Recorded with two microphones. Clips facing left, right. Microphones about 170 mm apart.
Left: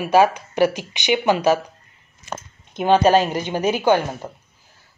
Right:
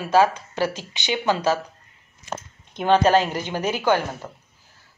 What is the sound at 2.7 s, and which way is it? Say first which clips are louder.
Speech: left 2 dB; 15° left (ahead or behind).